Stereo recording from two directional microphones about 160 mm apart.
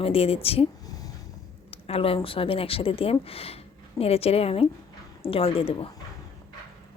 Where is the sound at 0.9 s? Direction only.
20° left (ahead or behind).